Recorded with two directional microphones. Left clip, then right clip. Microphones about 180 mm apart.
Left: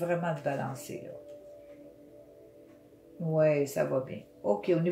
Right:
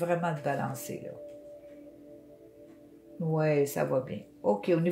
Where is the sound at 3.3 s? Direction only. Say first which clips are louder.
Left 2 dB; 40° right (ahead or behind).